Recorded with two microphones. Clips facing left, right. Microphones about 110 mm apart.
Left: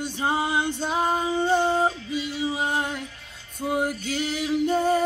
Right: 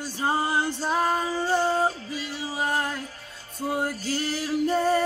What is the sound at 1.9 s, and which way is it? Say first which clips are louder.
Music: left 4 dB; 35° right (ahead or behind).